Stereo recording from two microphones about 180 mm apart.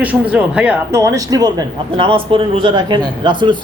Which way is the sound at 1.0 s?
20° right (ahead or behind).